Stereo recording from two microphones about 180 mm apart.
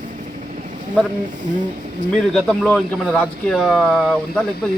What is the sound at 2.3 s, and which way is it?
Speech, 5° left (ahead or behind).